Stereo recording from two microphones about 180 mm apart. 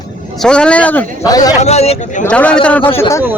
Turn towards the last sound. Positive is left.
turn(degrees=15)  # may be behind; listen again after turning